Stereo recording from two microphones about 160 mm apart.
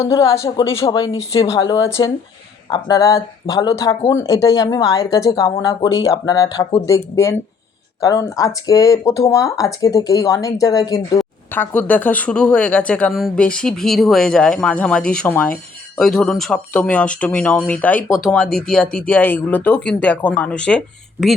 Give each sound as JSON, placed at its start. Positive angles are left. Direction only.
{"t": 0.0, "sound": "speech", "side_deg": 20}
{"t": 0.8, "sound": "speech", "side_deg": 35}
{"t": 1.1, "sound": "speech", "side_deg": 20}
{"t": 11.5, "sound": "speech", "side_deg": 10}